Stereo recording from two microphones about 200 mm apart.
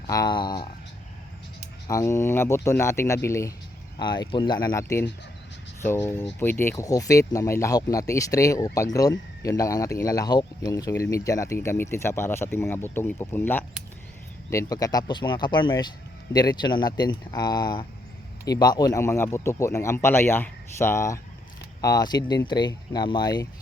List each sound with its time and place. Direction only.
0.1 s speech: 20° left (ahead or behind)
1.9 s speech: 15° left (ahead or behind)